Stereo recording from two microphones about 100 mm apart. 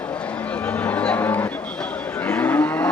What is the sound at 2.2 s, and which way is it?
Moo, 20° left (ahead or behind).